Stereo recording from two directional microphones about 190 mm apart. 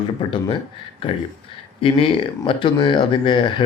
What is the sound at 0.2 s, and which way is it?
Speech, 25° left (ahead or behind).